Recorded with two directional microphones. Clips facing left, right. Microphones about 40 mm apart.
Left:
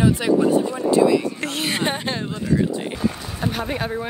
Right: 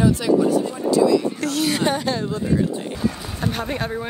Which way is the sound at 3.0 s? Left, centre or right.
Centre.